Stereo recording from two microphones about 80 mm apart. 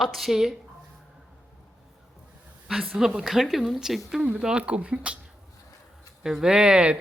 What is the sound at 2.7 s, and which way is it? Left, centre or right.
Speech, centre.